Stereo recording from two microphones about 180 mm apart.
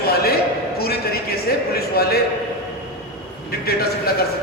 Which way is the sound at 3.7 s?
60° left (ahead or behind).